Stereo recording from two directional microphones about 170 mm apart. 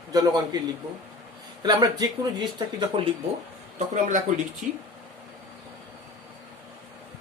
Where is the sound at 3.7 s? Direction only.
50° right (ahead or behind).